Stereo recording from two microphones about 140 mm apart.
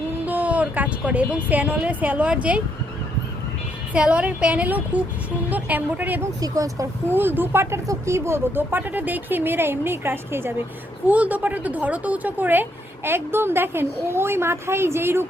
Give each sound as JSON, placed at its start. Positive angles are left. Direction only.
{"t": 0.3, "sound": "a woman's voice", "side_deg": -10}
{"t": 3.9, "sound": "speech", "side_deg": -10}
{"t": 6.4, "sound": "speech", "side_deg": -25}